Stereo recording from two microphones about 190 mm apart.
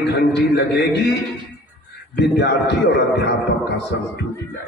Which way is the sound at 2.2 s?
65° left (ahead or behind).